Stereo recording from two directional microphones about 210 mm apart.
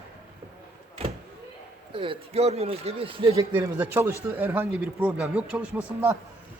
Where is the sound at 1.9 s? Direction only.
25° right (ahead or behind).